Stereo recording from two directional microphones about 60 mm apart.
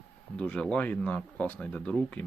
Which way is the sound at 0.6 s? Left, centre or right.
Centre.